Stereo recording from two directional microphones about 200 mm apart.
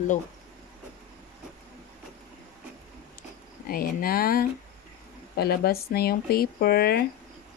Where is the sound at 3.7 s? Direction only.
45° left (ahead or behind).